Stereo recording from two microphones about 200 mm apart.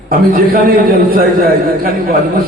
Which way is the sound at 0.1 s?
45° right (ahead or behind).